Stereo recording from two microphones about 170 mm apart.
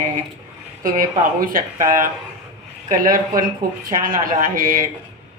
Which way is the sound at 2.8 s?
55° right (ahead or behind).